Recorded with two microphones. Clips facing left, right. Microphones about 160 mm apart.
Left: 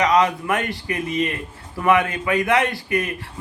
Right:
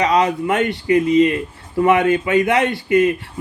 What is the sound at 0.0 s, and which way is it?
Speech, 25° right (ahead or behind).